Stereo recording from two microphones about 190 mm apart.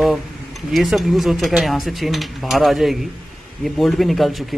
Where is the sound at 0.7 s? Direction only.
Centre (ahead or behind).